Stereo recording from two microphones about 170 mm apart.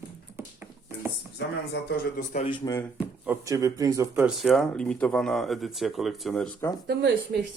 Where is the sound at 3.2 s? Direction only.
15° right (ahead or behind).